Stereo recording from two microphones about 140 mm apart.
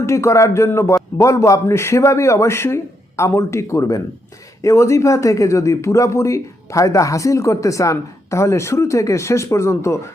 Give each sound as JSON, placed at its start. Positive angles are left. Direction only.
{"t": 0.0, "sound": "speech", "side_deg": 20}